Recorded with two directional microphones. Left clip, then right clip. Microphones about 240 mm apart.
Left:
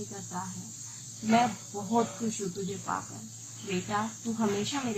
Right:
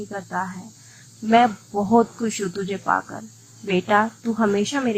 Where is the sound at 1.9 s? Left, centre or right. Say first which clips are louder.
Right 10 dB; right.